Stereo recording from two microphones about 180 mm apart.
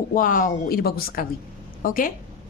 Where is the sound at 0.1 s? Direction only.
50° left (ahead or behind).